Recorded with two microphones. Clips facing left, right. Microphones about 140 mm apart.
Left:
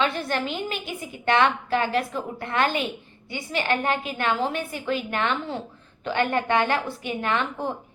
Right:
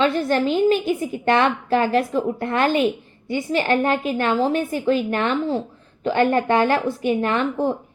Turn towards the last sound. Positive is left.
turn(degrees=-35)  # may be behind; listen again after turning